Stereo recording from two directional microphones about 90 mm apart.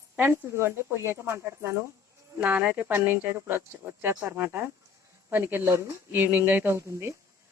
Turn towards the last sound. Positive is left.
turn(degrees=-30)  # may be behind; listen again after turning